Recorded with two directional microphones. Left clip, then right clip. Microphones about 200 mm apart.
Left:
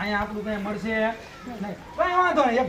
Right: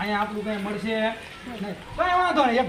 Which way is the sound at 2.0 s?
10° left (ahead or behind).